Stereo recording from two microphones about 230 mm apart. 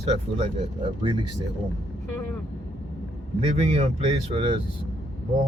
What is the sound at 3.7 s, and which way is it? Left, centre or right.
Speech, right.